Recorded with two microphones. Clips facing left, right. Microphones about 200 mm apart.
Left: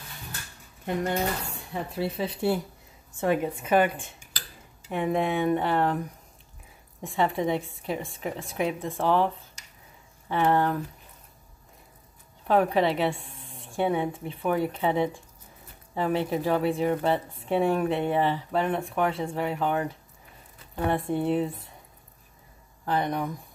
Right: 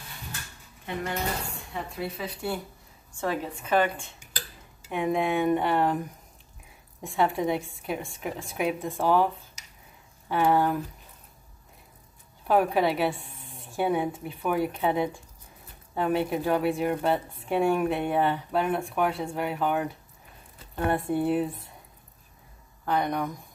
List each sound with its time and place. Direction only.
1.7 s a woman's voice: 30° left (ahead or behind)
3.2 s a woman's voice: 15° left (ahead or behind)
4.4 s a woman's voice: 5° right (ahead or behind)
12.4 s a woman's voice: 5° right (ahead or behind)
20.9 s a woman's voice: centre (ahead or behind)
22.8 s a woman's voice: centre (ahead or behind)